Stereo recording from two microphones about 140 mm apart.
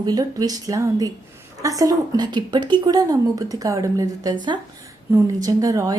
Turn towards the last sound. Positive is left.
turn(degrees=-25)  # may be behind; listen again after turning